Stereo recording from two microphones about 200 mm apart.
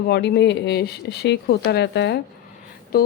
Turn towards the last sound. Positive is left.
turn(degrees=50)  # may be behind; listen again after turning